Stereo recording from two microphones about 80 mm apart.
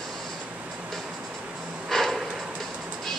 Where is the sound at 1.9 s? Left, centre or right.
Centre.